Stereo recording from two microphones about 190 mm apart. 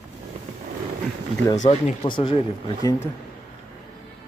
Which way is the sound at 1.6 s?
35° left (ahead or behind).